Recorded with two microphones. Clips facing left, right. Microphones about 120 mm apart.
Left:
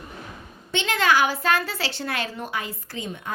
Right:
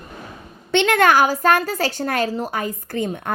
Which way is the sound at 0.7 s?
60° right (ahead or behind).